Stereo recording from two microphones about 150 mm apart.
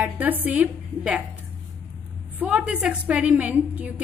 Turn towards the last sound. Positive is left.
turn(degrees=-10)  # may be behind; listen again after turning